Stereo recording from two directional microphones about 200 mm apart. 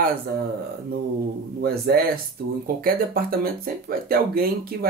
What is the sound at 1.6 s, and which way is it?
Speech, 50° right (ahead or behind).